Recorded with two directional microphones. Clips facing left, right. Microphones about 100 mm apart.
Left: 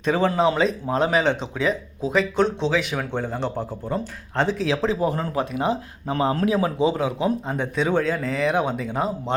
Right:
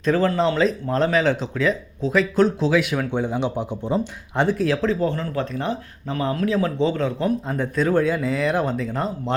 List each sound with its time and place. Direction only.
0.0 s speech: centre (ahead or behind)
3.1 s speech: 15° right (ahead or behind)
4.9 s a man's voice: 15° left (ahead or behind)
6.7 s speech: 10° left (ahead or behind)